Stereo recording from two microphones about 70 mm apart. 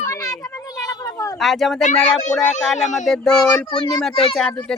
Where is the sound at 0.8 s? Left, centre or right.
Left.